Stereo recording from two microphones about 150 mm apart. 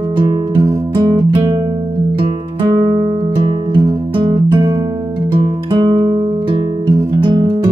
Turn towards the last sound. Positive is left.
turn(degrees=-30)  # may be behind; listen again after turning